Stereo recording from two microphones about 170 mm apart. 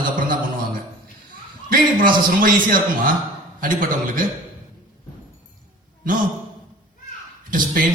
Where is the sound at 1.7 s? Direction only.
55° right (ahead or behind).